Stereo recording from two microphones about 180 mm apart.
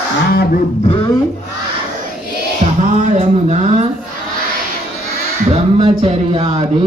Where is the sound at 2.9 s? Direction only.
40° right (ahead or behind).